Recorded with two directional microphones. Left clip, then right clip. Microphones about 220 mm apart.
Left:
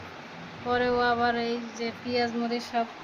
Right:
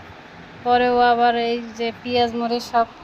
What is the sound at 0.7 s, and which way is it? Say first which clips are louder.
A woman's voice: right 9 dB; 20° right (ahead or behind).